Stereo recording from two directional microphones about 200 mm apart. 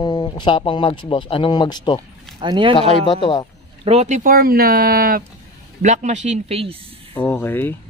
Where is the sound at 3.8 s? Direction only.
30° right (ahead or behind); by 5.2 s 45° right (ahead or behind).